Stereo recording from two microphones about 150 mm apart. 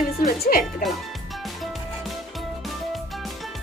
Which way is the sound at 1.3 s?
Centre (ahead or behind).